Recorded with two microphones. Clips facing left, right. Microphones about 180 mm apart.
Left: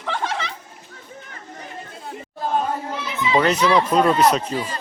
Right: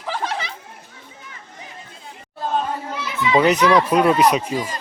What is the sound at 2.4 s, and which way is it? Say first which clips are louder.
Chatter: even; 10° left (ahead or behind).